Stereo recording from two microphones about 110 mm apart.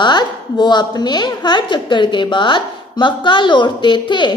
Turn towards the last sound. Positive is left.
turn(degrees=45)  # may be behind; listen again after turning